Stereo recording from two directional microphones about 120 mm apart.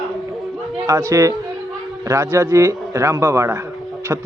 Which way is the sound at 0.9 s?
25° right (ahead or behind).